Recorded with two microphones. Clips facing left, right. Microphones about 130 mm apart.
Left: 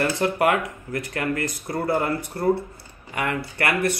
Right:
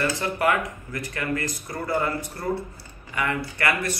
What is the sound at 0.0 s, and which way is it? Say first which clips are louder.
Speech: left 3 dB; 60° left (ahead or behind).